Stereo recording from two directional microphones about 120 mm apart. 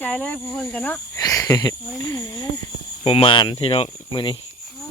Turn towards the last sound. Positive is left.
turn(degrees=40)  # may be behind; listen again after turning